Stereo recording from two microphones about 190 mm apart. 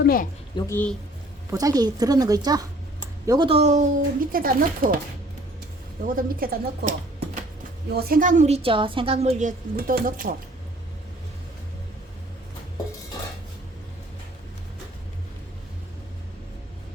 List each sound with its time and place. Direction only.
0.0 s a woman's voice: 50° left (ahead or behind)
0.7 s speech: 10° left (ahead or behind)
1.5 s a woman's voice: 20° right (ahead or behind); by 4.9 s 50° right (ahead or behind)
6.1 s a woman's voice: 50° right (ahead or behind)